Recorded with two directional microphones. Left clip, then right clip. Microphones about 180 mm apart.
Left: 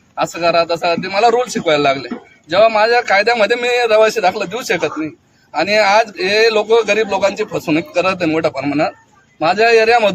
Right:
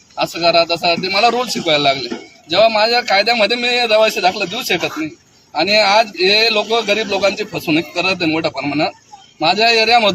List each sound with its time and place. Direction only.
0.2 s speech: 20° left (ahead or behind)